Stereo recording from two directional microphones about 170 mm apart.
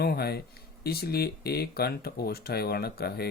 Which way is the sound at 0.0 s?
65° left (ahead or behind).